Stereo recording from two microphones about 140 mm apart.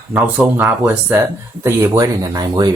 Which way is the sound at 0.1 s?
10° right (ahead or behind).